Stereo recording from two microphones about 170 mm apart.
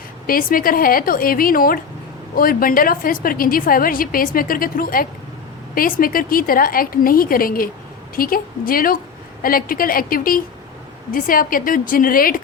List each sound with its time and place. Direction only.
0.3 s a woman's voice: 55° left (ahead or behind)